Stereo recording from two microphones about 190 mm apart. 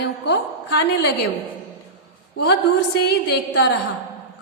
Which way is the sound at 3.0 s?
60° left (ahead or behind).